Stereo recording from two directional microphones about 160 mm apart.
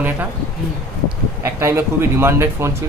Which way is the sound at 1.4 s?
15° right (ahead or behind).